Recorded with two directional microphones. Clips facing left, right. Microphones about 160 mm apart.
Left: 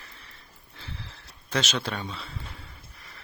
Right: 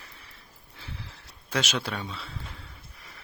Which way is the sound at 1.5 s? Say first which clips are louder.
Left 1 dB; 10° right (ahead or behind).